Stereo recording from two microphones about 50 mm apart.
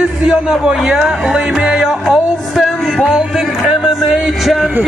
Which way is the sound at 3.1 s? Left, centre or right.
Centre.